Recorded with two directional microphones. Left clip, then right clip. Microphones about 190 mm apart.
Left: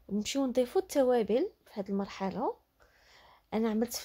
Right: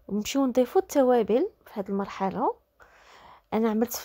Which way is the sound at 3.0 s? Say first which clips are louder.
Right 8 dB; 30° right (ahead or behind).